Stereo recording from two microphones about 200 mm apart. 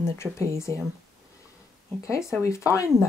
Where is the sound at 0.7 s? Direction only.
10° left (ahead or behind).